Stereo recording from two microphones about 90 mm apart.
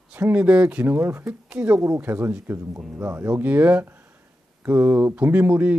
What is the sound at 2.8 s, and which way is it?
Speech, 15° right (ahead or behind).